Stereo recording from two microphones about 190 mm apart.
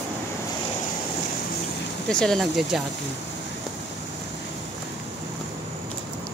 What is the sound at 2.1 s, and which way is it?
Speech, 5° left (ahead or behind).